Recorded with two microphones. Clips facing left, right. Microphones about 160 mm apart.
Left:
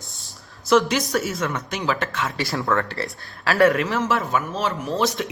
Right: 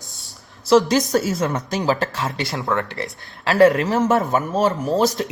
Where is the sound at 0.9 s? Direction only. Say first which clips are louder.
Right 5 dB; 35° right (ahead or behind).